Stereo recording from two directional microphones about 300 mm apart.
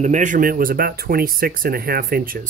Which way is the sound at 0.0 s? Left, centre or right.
Right.